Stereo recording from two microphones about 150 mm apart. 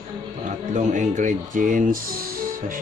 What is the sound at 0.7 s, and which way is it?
Speech, 55° right (ahead or behind).